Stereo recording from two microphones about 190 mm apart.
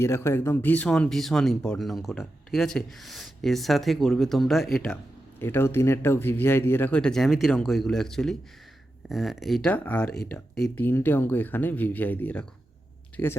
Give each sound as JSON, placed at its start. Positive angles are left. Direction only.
{"t": 0.0, "sound": "speech", "side_deg": 15}